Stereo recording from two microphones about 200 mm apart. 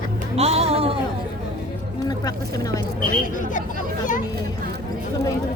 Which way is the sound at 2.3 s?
15° left (ahead or behind).